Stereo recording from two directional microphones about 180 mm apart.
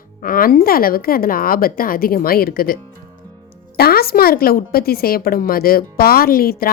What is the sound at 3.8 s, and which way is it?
A woman's voice, 60° left (ahead or behind).